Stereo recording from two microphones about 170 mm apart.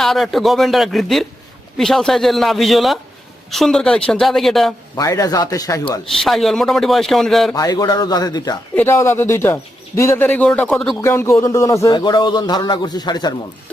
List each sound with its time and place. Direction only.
0.0 s a man's voice: centre (ahead or behind)
4.9 s speech: 20° left (ahead or behind)
6.1 s a man's voice: centre (ahead or behind)
7.5 s speech: 20° left (ahead or behind)